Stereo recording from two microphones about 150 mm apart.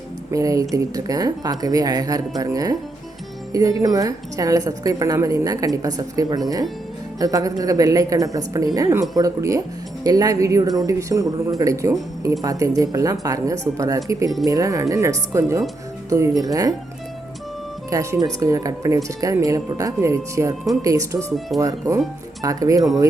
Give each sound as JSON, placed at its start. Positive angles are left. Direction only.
{"t": 0.3, "sound": "a woman's voice", "side_deg": -20}
{"t": 17.9, "sound": "a woman's voice", "side_deg": -20}